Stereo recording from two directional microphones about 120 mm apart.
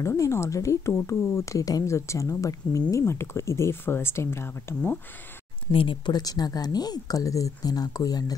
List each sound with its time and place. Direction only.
0.0 s speech: 25° left (ahead or behind)
5.7 s a woman's voice: 45° left (ahead or behind)